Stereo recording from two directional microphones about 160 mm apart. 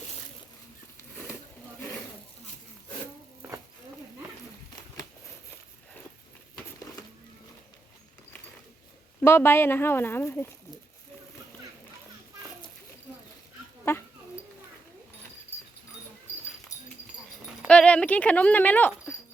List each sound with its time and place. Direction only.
9.2 s speech: 15° left (ahead or behind)
13.9 s goat: 15° left (ahead or behind)
17.7 s speech: 5° left (ahead or behind)